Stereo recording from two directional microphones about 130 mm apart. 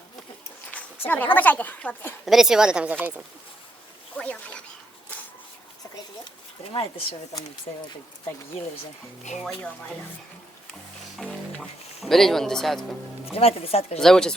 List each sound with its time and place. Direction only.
0.7 s speech: 10° left (ahead or behind)
2.2 s speech: 5° right (ahead or behind)
4.2 s duck: 10° left (ahead or behind)
7.3 s speech: 35° left (ahead or behind)
11.2 s music: 5° left (ahead or behind)
12.0 s speech: centre (ahead or behind)
13.3 s speech: 50° left (ahead or behind)
14.0 s speech: 5° left (ahead or behind)